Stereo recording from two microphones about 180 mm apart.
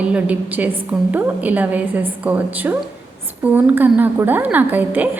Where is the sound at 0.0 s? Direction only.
5° right (ahead or behind).